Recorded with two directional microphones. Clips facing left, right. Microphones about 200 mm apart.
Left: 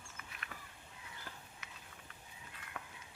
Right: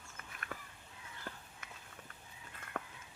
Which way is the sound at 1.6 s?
50° right (ahead or behind).